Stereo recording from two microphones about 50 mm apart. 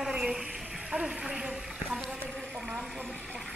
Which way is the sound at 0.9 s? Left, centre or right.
Right.